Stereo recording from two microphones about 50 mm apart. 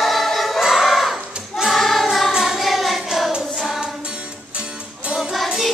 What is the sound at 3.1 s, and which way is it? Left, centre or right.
Hands, centre.